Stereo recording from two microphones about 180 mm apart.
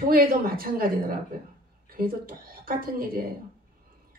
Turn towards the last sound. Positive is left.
turn(degrees=-55)  # may be behind; listen again after turning